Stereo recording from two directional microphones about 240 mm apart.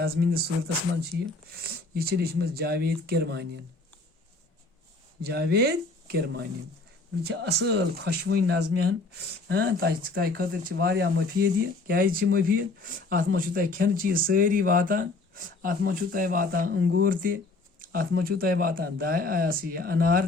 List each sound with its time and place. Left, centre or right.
0.0 s speech: right
1.5 s speech: right
5.2 s speech: right